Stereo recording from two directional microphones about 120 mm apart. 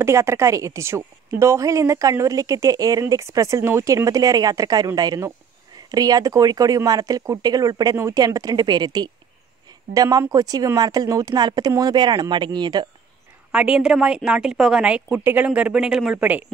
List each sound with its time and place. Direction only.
0.0 s speech: 25° right (ahead or behind); by 12.8 s 40° right (ahead or behind)
13.5 s a woman's voice: 10° right (ahead or behind)